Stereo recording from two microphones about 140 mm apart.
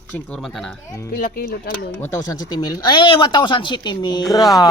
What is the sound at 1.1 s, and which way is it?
Speech, 90° left.